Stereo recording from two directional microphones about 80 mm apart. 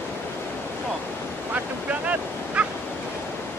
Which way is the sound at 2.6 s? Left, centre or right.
Centre.